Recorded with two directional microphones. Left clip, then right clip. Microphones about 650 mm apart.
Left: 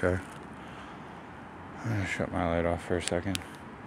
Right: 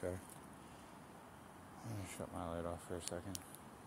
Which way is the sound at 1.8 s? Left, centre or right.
Centre.